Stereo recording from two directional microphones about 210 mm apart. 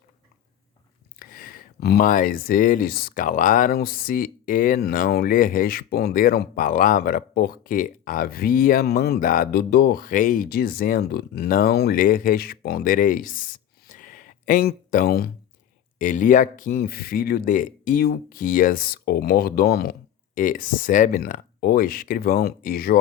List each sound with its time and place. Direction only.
1.2 s speech: 45° left (ahead or behind)